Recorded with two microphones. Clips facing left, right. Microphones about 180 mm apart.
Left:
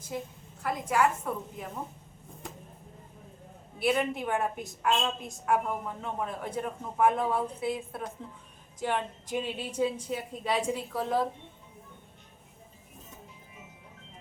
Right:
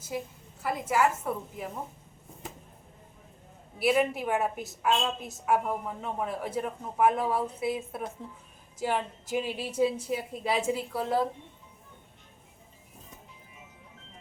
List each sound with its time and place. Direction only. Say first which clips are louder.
0.6 s a man's voice: right 1 dB; 5° right (ahead or behind)
3.8 s a man's voice: right 2 dB; 5° right (ahead or behind)